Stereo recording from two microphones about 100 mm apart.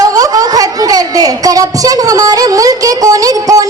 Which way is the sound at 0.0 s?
35° right (ahead or behind).